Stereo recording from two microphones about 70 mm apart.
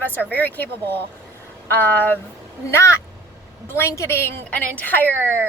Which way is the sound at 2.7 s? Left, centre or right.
Left.